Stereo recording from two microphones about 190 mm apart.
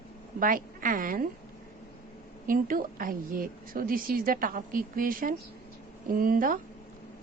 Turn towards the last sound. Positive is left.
turn(degrees=-45)  # may be behind; listen again after turning